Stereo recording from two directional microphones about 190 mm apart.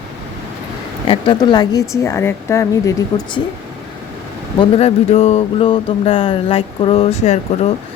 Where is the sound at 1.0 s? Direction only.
25° left (ahead or behind).